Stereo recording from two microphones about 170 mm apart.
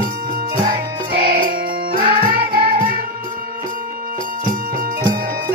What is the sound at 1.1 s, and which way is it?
Music, 60° right (ahead or behind).